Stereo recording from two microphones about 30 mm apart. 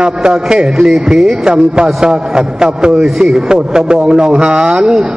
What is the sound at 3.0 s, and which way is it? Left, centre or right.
A man's voice, centre.